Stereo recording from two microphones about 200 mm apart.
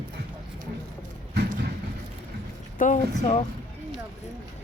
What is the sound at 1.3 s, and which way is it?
Clip-clop, 55° right (ahead or behind).